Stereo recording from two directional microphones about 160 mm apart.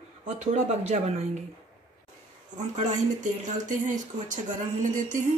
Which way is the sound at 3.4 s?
50° right (ahead or behind).